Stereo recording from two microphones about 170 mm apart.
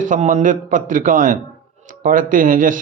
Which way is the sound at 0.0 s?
45° right (ahead or behind).